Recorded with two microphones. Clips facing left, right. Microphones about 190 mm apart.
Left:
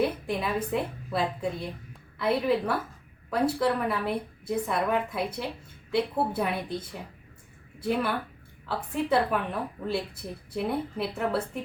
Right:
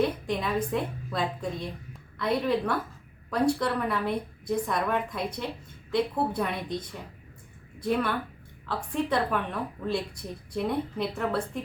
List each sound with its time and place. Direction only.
0.0 s a woman's voice: 5° left (ahead or behind)